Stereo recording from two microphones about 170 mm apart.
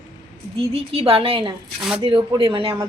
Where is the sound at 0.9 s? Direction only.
35° right (ahead or behind).